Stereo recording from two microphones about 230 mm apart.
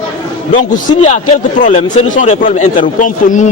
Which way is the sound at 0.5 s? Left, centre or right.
Left.